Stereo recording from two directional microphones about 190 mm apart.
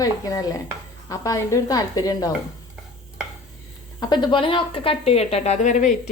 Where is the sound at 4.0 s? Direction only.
20° left (ahead or behind); by 5.9 s 40° left (ahead or behind).